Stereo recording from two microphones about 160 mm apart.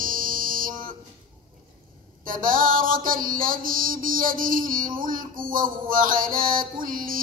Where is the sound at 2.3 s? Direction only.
60° right (ahead or behind).